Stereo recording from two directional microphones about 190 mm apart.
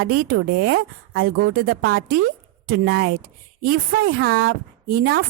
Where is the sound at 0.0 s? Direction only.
55° right (ahead or behind).